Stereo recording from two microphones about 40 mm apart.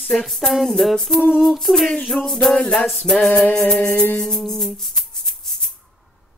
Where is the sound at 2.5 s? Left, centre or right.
Centre.